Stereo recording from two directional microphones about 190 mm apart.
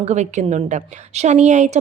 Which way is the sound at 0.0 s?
35° right (ahead or behind).